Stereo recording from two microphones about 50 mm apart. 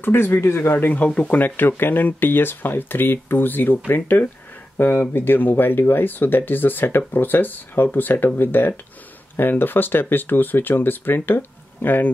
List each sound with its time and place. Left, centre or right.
0.0 s speech: left
1.4 s speech: left